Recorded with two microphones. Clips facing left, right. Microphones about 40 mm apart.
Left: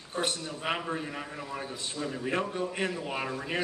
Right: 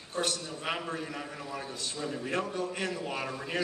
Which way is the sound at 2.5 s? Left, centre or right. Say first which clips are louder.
Left 2 dB; left.